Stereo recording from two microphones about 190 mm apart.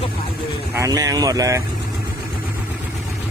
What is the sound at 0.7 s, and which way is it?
Speech, 15° right (ahead or behind).